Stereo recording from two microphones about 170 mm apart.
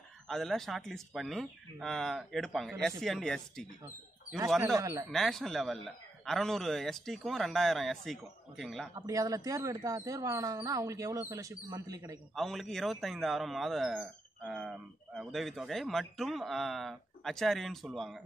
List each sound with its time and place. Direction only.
0.3 s a man's voice: centre (ahead or behind)
4.7 s speech: 20° right (ahead or behind)
5.1 s a man's voice: centre (ahead or behind)
8.9 s speech: 20° right (ahead or behind)
12.4 s a man's voice: centre (ahead or behind)